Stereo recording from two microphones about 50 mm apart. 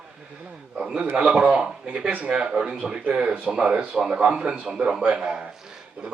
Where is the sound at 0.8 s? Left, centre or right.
Centre.